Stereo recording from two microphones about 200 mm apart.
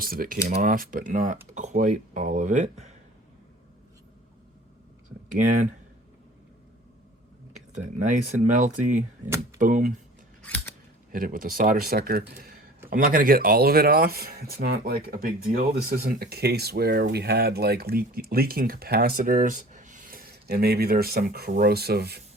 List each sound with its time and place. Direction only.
0.0 s speech: 45° right (ahead or behind)
7.7 s speech: 40° right (ahead or behind)
10.4 s scissors: 10° left (ahead or behind)
11.1 s speech: 45° right (ahead or behind)